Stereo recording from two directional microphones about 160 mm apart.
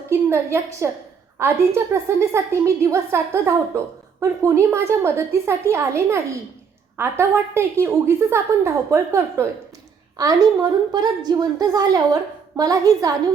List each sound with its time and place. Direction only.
0.1 s a woman's voice: 15° right (ahead or behind)